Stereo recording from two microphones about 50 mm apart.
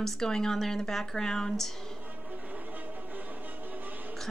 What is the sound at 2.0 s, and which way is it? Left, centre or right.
Music, right.